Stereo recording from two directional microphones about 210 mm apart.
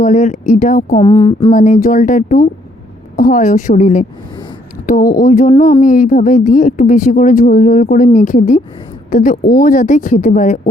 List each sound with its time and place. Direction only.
0.0 s a woman's voice: 35° left (ahead or behind)
0.9 s speech: 20° left (ahead or behind)
1.5 s a woman's voice: 35° left (ahead or behind)
5.2 s a woman's voice: 35° left (ahead or behind)